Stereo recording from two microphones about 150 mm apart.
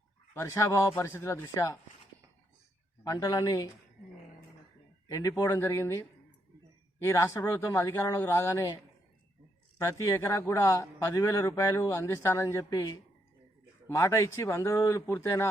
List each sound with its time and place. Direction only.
0.3 s a man's voice: 20° left (ahead or behind)
3.0 s a man's voice: 25° left (ahead or behind)
5.1 s a man's voice: 20° left (ahead or behind)
7.0 s a man's voice: 20° left (ahead or behind)
9.8 s a man's voice: 20° left (ahead or behind)